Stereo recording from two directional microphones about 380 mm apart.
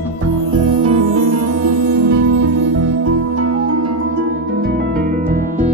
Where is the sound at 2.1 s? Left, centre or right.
Right.